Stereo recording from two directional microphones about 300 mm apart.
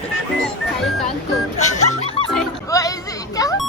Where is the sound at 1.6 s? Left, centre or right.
Left.